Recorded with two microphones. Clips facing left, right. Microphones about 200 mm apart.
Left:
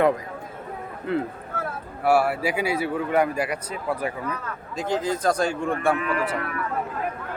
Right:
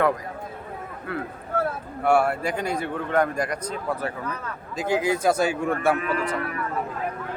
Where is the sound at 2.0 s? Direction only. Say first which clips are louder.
Even; 5° left (ahead or behind).